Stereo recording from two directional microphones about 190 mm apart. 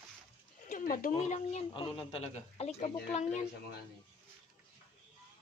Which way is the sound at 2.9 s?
45° left (ahead or behind).